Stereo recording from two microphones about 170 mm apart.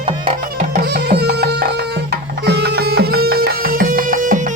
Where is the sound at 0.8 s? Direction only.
70° right (ahead or behind).